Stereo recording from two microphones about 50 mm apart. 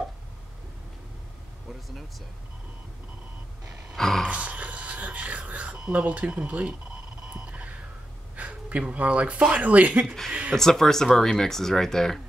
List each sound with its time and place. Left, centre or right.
3.9 s a sound: centre
4.3 s speech: right
8.4 s speech: right
10.0 s speech: centre